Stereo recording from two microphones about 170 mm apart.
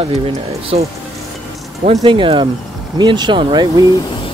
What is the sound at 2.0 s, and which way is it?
Speech, 30° right (ahead or behind).